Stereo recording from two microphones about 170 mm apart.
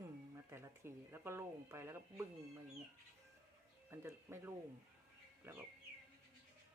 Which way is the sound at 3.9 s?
15° right (ahead or behind).